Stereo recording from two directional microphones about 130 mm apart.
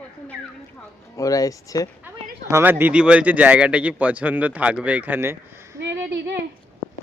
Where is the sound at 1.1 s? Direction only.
25° left (ahead or behind).